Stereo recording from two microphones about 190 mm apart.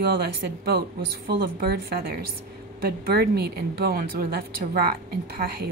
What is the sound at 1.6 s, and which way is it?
A woman's voice, 55° right (ahead or behind).